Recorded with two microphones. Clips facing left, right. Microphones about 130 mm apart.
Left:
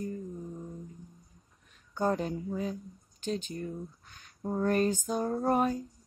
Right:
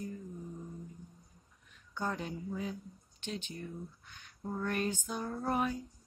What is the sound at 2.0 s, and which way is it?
Speech, 40° left (ahead or behind).